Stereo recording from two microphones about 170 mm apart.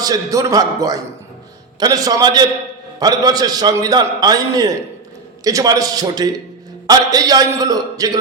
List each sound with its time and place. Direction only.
0.0 s a man's voice: 20° right (ahead or behind)